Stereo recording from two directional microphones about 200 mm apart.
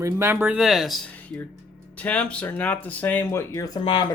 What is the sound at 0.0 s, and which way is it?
Speech, 15° right (ahead or behind).